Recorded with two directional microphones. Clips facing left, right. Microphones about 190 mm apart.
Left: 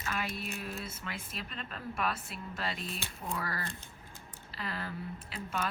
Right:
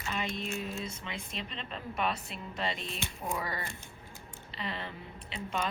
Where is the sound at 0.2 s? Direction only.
5° left (ahead or behind).